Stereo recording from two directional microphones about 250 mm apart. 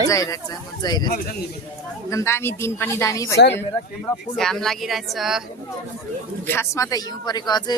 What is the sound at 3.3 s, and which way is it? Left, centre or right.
Speech, left.